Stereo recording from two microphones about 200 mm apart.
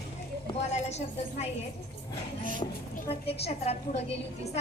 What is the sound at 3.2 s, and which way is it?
A woman's voice, 30° left (ahead or behind).